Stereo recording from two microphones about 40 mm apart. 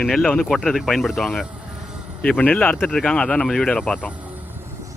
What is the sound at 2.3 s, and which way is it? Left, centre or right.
Speech, left.